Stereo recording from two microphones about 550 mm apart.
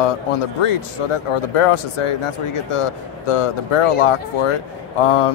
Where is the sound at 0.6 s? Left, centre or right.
Left.